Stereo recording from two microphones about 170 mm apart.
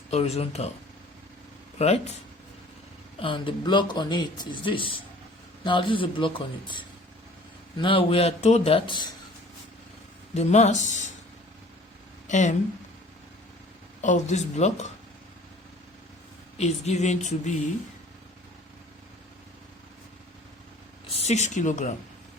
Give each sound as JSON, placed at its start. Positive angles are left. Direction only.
{"t": 0.1, "sound": "speech", "side_deg": 35}
{"t": 1.8, "sound": "speech", "side_deg": 40}
{"t": 3.2, "sound": "speech", "side_deg": 30}
{"t": 10.3, "sound": "speech", "side_deg": 40}
{"t": 12.3, "sound": "speech", "side_deg": 45}
{"t": 14.0, "sound": "speech", "side_deg": 45}
{"t": 16.6, "sound": "speech", "side_deg": 40}
{"t": 21.1, "sound": "speech", "side_deg": 40}